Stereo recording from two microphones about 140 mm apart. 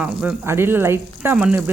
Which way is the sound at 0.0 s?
10° right (ahead or behind).